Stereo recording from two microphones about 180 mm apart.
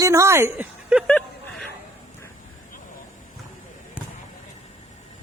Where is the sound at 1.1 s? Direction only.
5° left (ahead or behind).